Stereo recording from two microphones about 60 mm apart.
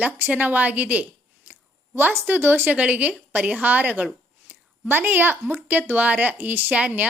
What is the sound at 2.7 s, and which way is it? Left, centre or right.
A woman's voice, right.